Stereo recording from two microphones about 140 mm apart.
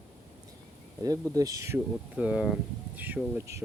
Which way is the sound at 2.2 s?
10° right (ahead or behind).